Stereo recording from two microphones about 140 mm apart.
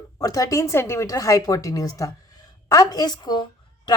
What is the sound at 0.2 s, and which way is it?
A woman's voice, 25° left (ahead or behind).